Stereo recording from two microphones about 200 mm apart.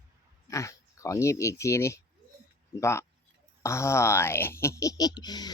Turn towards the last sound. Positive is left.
turn(degrees=20)  # may be behind; listen again after turning